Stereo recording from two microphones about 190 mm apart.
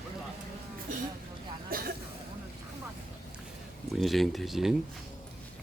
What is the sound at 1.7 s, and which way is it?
Cough, 50° right (ahead or behind).